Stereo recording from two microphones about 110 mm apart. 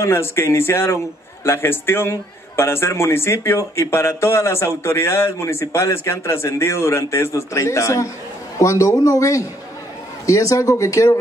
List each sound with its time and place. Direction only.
0.0 s a man's voice: 25° left (ahead or behind)